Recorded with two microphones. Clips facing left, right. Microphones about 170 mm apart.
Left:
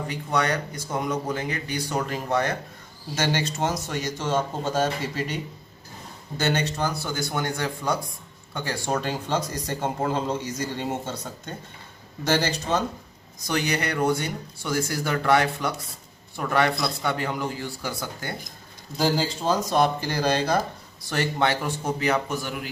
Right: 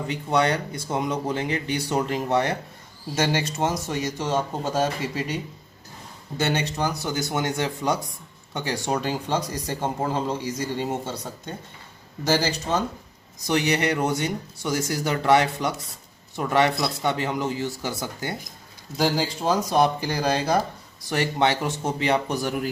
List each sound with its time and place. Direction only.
0.1 s speech: 25° right (ahead or behind)
3.2 s speech: 10° right (ahead or behind)
6.4 s speech: 10° right (ahead or behind)
13.5 s speech: 20° right (ahead or behind); by 22.7 s 40° right (ahead or behind)